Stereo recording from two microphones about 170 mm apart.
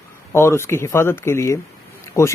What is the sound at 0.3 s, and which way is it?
Speech, 15° left (ahead or behind).